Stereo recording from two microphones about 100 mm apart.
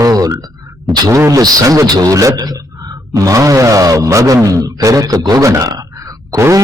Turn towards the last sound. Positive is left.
turn(degrees=-30)  # may be behind; listen again after turning